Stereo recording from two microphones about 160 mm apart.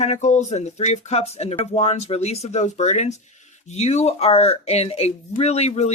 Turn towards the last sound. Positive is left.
turn(degrees=45)  # may be behind; listen again after turning